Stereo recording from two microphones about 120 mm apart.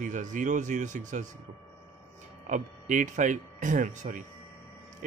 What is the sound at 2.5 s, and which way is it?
A man's voice, 90° right.